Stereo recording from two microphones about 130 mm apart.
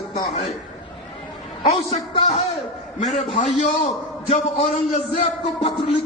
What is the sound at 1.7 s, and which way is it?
Speech, 60° left (ahead or behind).